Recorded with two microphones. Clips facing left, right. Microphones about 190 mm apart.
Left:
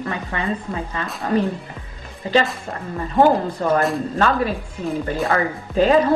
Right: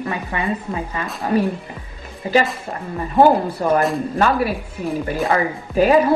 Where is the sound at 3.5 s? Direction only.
10° right (ahead or behind).